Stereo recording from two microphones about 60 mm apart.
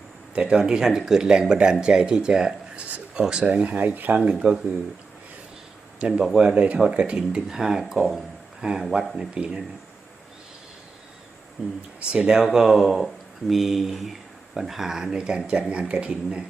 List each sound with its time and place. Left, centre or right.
0.3 s speech: centre
6.0 s speech: centre
11.6 s speech: centre